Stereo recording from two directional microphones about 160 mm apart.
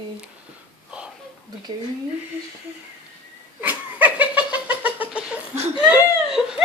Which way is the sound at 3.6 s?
10° right (ahead or behind).